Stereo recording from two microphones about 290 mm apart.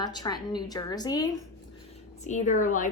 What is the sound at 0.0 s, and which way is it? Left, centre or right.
A woman's voice, centre.